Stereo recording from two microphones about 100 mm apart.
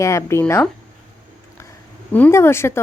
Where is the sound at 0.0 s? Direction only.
30° left (ahead or behind).